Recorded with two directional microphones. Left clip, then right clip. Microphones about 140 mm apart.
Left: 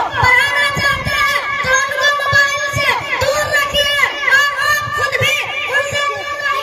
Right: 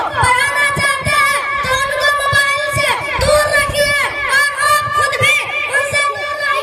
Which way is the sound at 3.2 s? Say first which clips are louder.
Right 5 dB; 40° right (ahead or behind).